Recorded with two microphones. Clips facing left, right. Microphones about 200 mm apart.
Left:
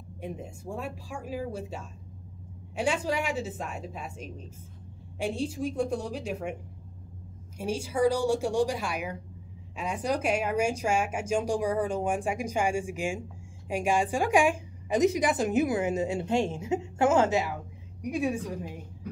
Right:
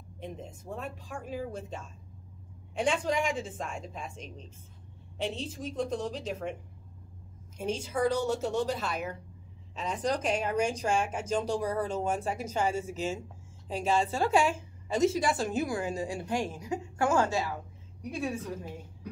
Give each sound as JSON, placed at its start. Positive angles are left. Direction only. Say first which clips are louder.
{"t": 0.2, "sound": "a woman's voice", "louder": "left 3 dB", "side_deg": 10}
{"t": 7.5, "sound": "a woman's voice", "louder": "left 2 dB", "side_deg": 10}